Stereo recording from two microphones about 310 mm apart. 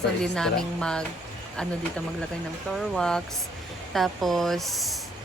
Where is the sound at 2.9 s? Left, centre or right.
Centre.